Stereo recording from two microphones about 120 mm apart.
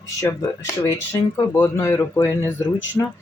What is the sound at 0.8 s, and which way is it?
Speech, 20° left (ahead or behind).